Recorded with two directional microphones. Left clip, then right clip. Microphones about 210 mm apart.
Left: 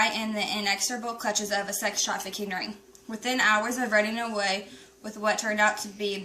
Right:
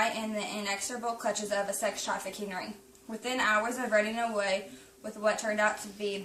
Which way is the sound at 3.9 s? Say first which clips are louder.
Left 2 dB; 5° right (ahead or behind).